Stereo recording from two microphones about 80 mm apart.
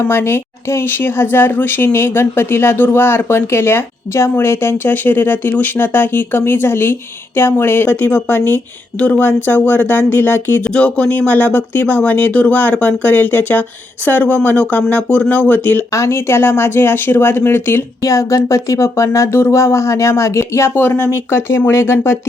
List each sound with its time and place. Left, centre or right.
0.0 s speech: left
10.6 s speech: centre
15.9 s speech: left
18.0 s speech: left